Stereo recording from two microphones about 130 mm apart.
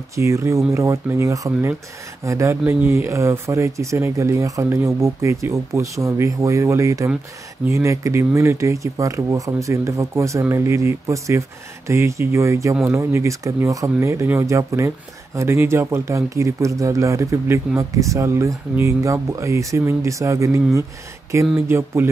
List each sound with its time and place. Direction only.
0.1 s speech: 25° right (ahead or behind)